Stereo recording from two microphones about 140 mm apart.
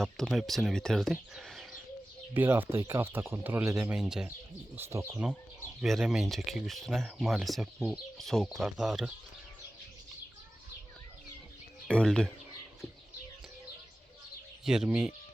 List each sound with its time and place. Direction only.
0.0 s speech: centre (ahead or behind)
2.3 s speech: 15° right (ahead or behind)
4.7 s speech: 15° right (ahead or behind)
5.8 s speech: centre (ahead or behind)
11.9 s speech: 5° left (ahead or behind)
14.6 s speech: 5° right (ahead or behind)